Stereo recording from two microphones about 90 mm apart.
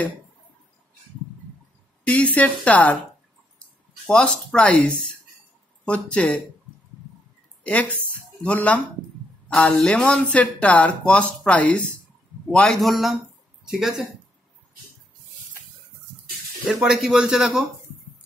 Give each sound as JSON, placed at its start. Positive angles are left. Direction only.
{"t": 2.0, "sound": "speech", "side_deg": 15}
{"t": 4.1, "sound": "speech", "side_deg": 10}
{"t": 7.6, "sound": "speech", "side_deg": 15}
{"t": 16.6, "sound": "speech", "side_deg": -5}